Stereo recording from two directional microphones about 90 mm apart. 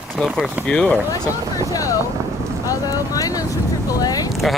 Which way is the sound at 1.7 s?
40° left (ahead or behind).